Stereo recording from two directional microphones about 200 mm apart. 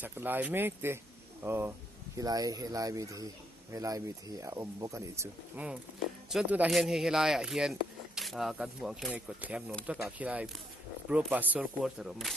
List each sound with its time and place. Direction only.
0.0 s speech: 10° right (ahead or behind)